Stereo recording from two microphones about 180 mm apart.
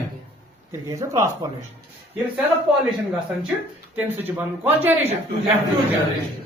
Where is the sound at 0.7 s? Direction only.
20° right (ahead or behind).